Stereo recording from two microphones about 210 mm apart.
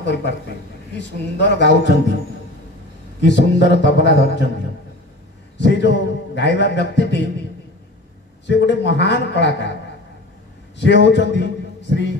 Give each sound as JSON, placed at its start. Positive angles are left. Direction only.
{"t": 0.0, "sound": "a man's voice", "side_deg": 55}
{"t": 3.2, "sound": "a man's voice", "side_deg": 55}
{"t": 5.6, "sound": "a man's voice", "side_deg": 55}
{"t": 8.5, "sound": "a man's voice", "side_deg": 55}
{"t": 10.8, "sound": "a man's voice", "side_deg": 55}